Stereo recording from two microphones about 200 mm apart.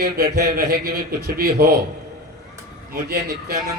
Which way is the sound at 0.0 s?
55° right (ahead or behind).